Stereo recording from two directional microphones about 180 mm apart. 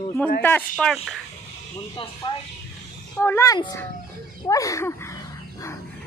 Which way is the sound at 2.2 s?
25° left (ahead or behind).